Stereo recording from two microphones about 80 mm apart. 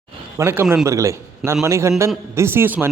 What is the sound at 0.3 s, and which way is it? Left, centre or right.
A man's voice, right.